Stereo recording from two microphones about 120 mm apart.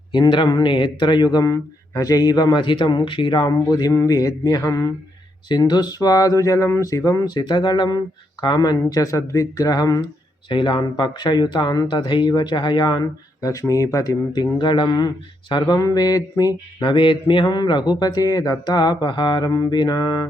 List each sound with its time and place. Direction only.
0.1 s speech: 40° left (ahead or behind)
5.5 s speech: 35° left (ahead or behind)
10.5 s speech: 45° left (ahead or behind)